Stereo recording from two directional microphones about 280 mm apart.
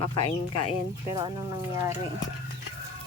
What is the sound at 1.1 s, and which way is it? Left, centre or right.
Speech, centre.